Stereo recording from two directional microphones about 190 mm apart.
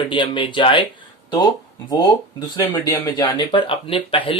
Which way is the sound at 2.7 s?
20° left (ahead or behind).